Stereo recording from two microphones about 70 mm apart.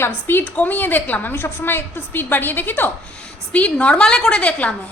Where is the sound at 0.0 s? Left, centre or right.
Left.